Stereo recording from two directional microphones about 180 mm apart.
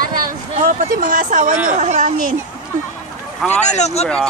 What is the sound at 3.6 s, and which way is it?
Speech, 40° left (ahead or behind).